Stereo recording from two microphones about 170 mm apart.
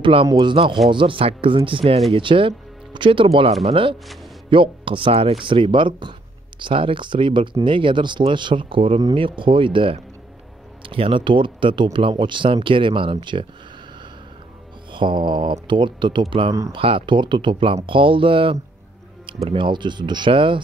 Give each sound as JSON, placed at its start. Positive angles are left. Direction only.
{"t": 0.0, "sound": "speech", "side_deg": -30}
{"t": 14.9, "sound": "speech", "side_deg": -30}